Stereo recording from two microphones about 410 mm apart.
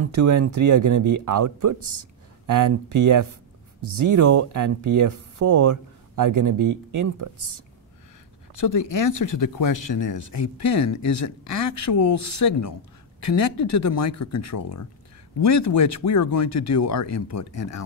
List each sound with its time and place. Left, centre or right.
0.2 s speech: right
9.1 s speech: left